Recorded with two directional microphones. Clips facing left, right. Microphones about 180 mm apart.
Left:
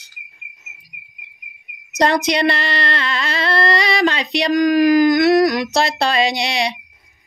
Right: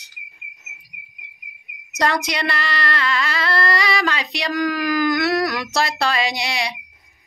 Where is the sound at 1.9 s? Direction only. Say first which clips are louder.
Left 5 dB; 20° left (ahead or behind).